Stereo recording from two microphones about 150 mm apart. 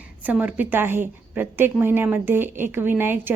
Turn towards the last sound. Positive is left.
turn(degrees=-15)  # may be behind; listen again after turning